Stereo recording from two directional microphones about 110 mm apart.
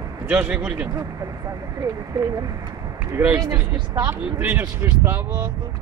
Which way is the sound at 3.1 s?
20° right (ahead or behind).